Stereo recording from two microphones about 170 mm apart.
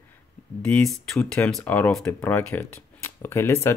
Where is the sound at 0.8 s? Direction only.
5° left (ahead or behind).